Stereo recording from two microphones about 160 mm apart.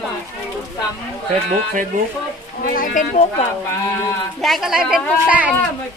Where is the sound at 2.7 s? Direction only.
55° left (ahead or behind).